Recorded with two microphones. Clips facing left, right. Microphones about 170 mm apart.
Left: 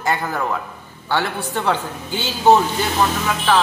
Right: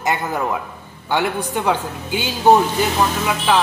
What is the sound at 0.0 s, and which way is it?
A man's voice, 20° right (ahead or behind).